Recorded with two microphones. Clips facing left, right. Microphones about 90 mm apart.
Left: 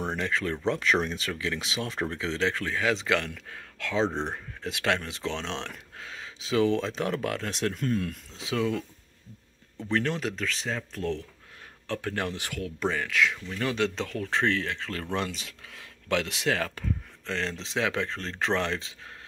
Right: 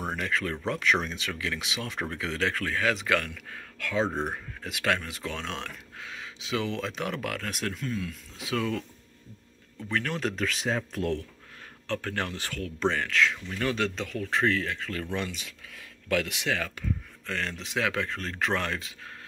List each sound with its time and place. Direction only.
0.1 s speech: 30° left (ahead or behind)
4.0 s speech: 10° right (ahead or behind)
4.6 s speech: 30° left (ahead or behind)
7.7 s speech: 55° left (ahead or behind)
8.4 s speech: 20° left (ahead or behind)
9.9 s speech: 20° left (ahead or behind)
10.2 s speech: 5° right (ahead or behind)
11.9 s speech: 15° left (ahead or behind)
16.3 s speech: 35° left (ahead or behind)
17.3 s speech: 25° left (ahead or behind)